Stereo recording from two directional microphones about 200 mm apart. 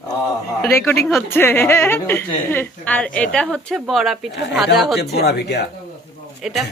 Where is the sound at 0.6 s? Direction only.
10° left (ahead or behind).